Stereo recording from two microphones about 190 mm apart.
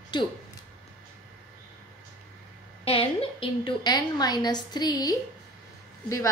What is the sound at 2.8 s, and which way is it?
A woman's voice, 30° left (ahead or behind).